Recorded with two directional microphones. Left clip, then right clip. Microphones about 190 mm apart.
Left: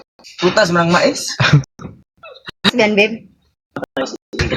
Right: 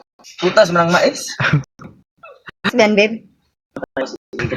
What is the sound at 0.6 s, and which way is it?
Speech, 20° right (ahead or behind).